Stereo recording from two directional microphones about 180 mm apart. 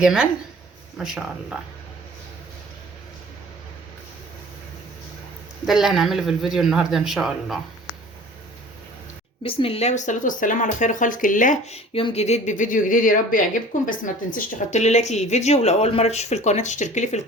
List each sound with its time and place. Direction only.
0.0 s speech: 5° right (ahead or behind)
5.6 s speech: centre (ahead or behind)
9.4 s a woman's voice: 30° left (ahead or behind)